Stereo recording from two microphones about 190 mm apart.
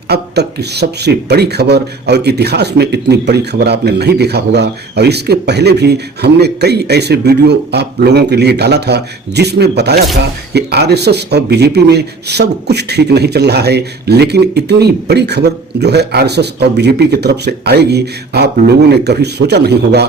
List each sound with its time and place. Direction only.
0.1 s speech: 60° right (ahead or behind)